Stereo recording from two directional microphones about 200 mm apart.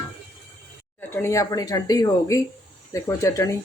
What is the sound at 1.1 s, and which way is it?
Speech, 15° left (ahead or behind).